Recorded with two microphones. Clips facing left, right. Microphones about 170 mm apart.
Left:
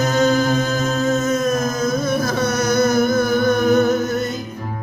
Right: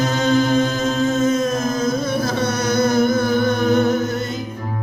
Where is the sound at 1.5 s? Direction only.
25° right (ahead or behind).